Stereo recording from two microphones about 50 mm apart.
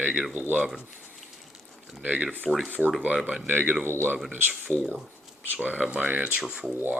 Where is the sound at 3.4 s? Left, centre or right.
Right.